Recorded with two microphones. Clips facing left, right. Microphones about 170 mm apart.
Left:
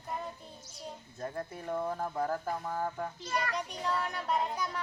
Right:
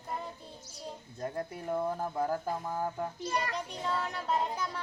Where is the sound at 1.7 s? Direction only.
15° right (ahead or behind).